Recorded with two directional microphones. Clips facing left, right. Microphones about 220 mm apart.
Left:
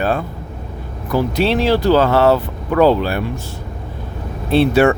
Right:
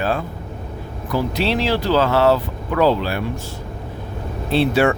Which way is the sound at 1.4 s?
50° left (ahead or behind).